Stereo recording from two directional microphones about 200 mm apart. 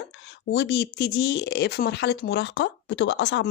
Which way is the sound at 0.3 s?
60° left (ahead or behind).